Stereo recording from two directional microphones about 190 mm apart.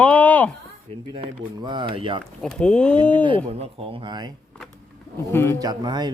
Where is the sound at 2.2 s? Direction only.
5° left (ahead or behind).